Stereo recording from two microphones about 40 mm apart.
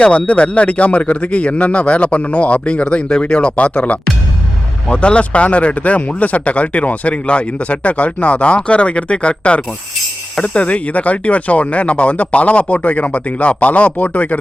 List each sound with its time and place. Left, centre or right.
0.0 s speech: left
4.9 s speech: left